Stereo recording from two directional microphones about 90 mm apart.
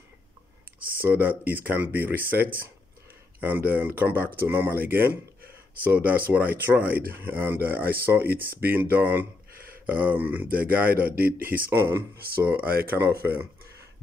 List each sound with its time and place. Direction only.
1.0 s speech: 20° right (ahead or behind)
3.3 s speech: 20° right (ahead or behind)